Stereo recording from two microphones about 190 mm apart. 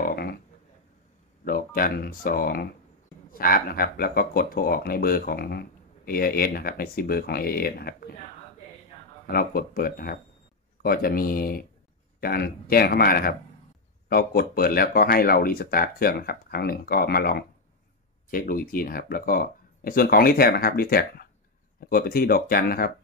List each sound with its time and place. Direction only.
0.1 s a sound: 55° left (ahead or behind)
1.4 s speech: 50° left (ahead or behind)
9.3 s speech: 50° left (ahead or behind)